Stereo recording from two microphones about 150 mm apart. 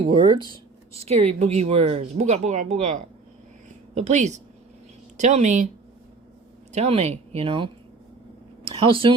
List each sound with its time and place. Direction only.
0.1 s speech: 35° right (ahead or behind); by 3.0 s 50° right (ahead or behind)
3.7 s a sound: 50° right (ahead or behind)
5.1 s speech: 50° right (ahead or behind)
6.7 s a woman's voice: 45° right (ahead or behind)